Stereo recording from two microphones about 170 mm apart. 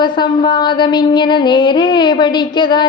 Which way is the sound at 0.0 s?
25° left (ahead or behind).